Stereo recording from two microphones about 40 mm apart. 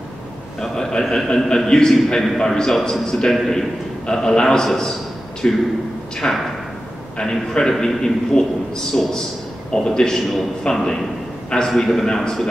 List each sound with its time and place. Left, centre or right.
0.6 s a man's voice: centre
7.7 s a man's voice: centre
8.3 s a man's voice: left
8.9 s a man's voice: centre